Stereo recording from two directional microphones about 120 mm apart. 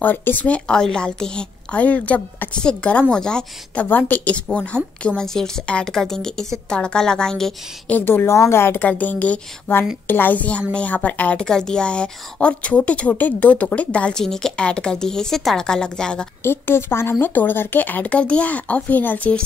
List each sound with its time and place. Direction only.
0.0 s a woman's voice: 15° left (ahead or behind)
8.0 s a woman's voice: 20° left (ahead or behind)
16.4 s a woman's voice: 20° left (ahead or behind)